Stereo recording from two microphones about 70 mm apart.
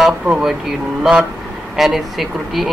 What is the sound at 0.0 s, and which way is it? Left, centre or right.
Speech, centre.